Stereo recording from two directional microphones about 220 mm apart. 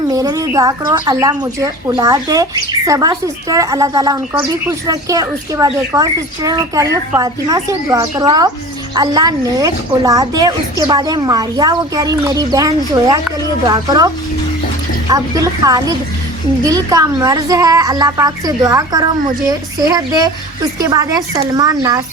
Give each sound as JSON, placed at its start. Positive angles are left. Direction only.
{"t": 0.1, "sound": "speech", "side_deg": -15}
{"t": 15.1, "sound": "speech", "side_deg": -15}